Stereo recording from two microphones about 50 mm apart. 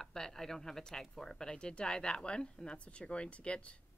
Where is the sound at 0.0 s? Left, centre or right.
Centre.